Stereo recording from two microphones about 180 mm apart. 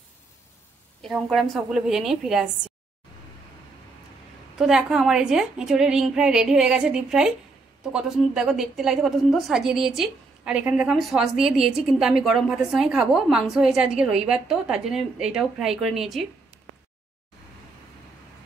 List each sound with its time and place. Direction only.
1.0 s a woman's voice: centre (ahead or behind)
4.6 s a woman's voice: 5° right (ahead or behind)